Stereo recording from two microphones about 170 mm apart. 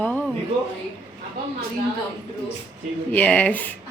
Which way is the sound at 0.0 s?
10° left (ahead or behind).